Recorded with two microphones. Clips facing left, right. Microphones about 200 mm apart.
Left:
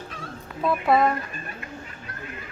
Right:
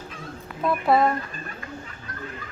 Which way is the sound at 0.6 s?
Centre (ahead or behind).